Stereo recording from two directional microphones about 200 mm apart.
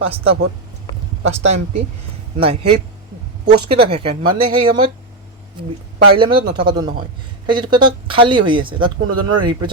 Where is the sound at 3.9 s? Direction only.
30° right (ahead or behind).